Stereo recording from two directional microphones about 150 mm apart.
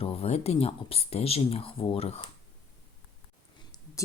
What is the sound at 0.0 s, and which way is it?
Speech, 40° left (ahead or behind).